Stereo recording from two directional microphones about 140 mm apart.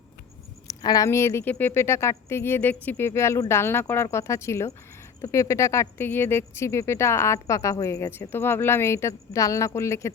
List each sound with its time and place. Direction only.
0.7 s speech: 25° left (ahead or behind)